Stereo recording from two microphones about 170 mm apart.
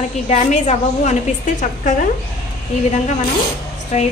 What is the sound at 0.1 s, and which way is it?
A woman's voice, 40° left (ahead or behind).